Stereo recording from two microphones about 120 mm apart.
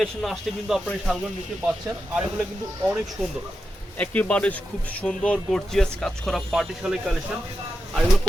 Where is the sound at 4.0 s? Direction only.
10° left (ahead or behind).